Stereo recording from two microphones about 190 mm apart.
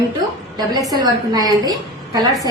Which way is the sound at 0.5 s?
20° right (ahead or behind).